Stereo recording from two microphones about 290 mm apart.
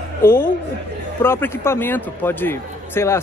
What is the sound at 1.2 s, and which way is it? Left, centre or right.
A man's voice, centre.